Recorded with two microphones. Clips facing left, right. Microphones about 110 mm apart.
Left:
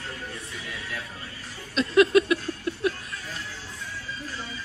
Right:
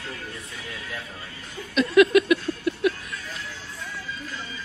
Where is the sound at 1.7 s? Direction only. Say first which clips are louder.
Right 2 dB; 30° left (ahead or behind).